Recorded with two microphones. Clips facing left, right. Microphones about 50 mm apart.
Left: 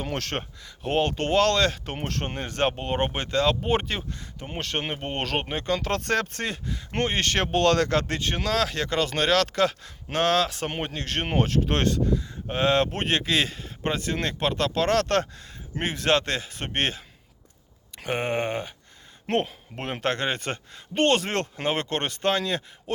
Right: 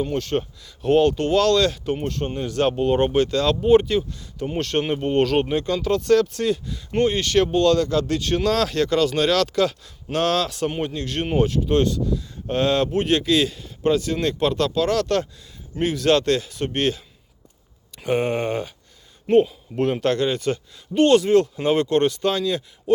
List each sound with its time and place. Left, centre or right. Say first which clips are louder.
0.0 s speech: right 7 dB; left
0.6 s speech: right 8 dB; left
3.7 s speech: right 10 dB; left
4.4 s speech: right 8 dB; left
5.7 s speech: right 7 dB; left
7.5 s speech: left 1 dB; left
8.0 s speech: right 6 dB; left
8.4 s speech: right 4 dB; centre
8.9 s speech: right 2 dB; left
12.5 s speech: right 2 dB; left
12.9 s speech: right 6 dB; left
14.7 s speech: right 2 dB; left
19.3 s speech: right 9 dB; left
19.7 s speech: right 7 dB; left